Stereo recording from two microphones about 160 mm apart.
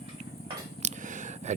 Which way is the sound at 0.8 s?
50° right (ahead or behind).